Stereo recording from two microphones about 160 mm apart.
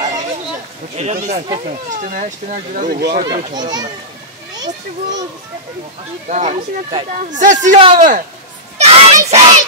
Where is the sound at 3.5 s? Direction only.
25° right (ahead or behind).